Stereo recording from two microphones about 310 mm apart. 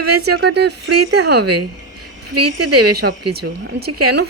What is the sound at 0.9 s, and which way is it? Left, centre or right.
A woman's voice, right.